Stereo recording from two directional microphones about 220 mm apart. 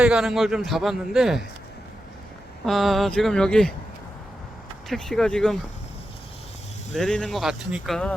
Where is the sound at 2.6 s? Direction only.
Centre (ahead or behind).